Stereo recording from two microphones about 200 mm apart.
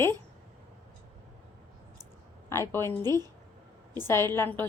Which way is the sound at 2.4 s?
15° left (ahead or behind).